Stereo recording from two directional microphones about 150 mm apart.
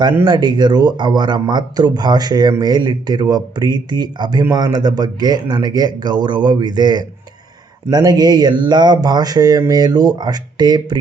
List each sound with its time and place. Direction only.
0.3 s speech: 30° right (ahead or behind)